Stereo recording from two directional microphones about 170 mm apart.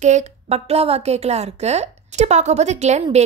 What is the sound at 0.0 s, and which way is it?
A woman's voice, 40° right (ahead or behind).